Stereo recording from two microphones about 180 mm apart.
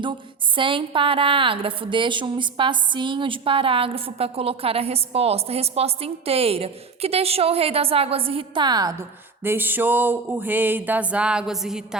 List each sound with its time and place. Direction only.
0.5 s a woman's voice: 30° right (ahead or behind); by 11.9 s 5° right (ahead or behind)